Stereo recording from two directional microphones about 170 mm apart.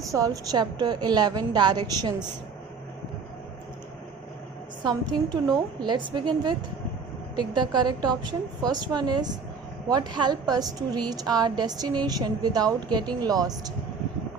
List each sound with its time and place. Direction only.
0.0 s a woman's voice: 20° right (ahead or behind)
4.8 s a woman's voice: 25° right (ahead or behind)